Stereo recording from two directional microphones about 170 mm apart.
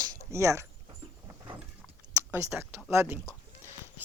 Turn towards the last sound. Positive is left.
turn(degrees=-15)  # may be behind; listen again after turning